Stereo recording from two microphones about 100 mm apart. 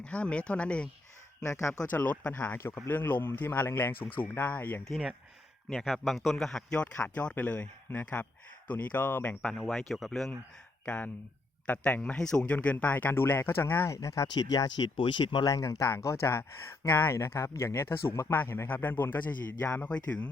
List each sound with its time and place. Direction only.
0.0 s speech: 10° left (ahead or behind)
1.4 s speech: 30° left (ahead or behind)
1.8 s speech: 15° left (ahead or behind)
4.9 s speech: centre (ahead or behind); by 9.4 s 20° left (ahead or behind)
9.6 s speech: centre (ahead or behind); by 14.3 s 30° left (ahead or behind)
14.3 s speech: 45° left (ahead or behind)
15.5 s speech: 40° left (ahead or behind); by 20.0 s 15° left (ahead or behind)